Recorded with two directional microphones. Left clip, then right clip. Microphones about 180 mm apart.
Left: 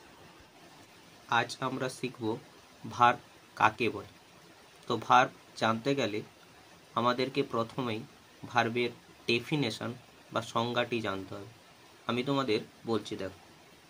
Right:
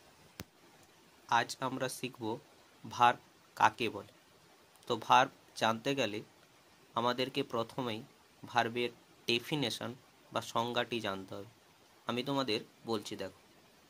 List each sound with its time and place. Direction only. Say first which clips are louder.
1.3 s speech: left 2 dB; 40° right (ahead or behind)